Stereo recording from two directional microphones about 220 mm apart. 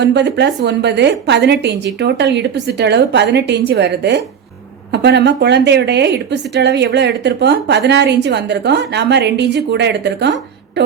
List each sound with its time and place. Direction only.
0.0 s a woman's voice: 50° right (ahead or behind)